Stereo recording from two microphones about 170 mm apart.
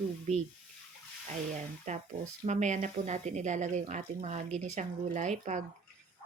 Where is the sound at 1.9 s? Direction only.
45° right (ahead or behind).